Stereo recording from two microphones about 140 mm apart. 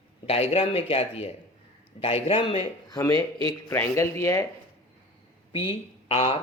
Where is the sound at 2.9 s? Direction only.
25° left (ahead or behind).